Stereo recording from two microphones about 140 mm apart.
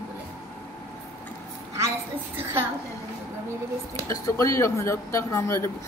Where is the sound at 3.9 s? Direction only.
25° left (ahead or behind).